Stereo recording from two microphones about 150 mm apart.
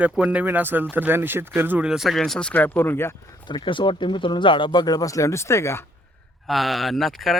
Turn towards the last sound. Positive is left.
turn(degrees=0)  # may be behind; listen again after turning